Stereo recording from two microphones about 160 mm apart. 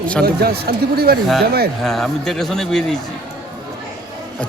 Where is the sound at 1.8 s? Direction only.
Centre (ahead or behind).